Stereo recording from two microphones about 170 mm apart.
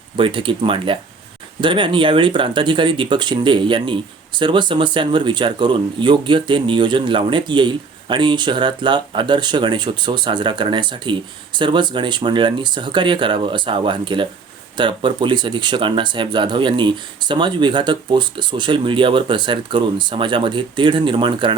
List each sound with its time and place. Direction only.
0.2 s speech: 30° right (ahead or behind)